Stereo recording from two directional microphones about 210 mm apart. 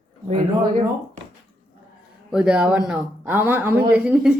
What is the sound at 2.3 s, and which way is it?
Speech, 5° right (ahead or behind).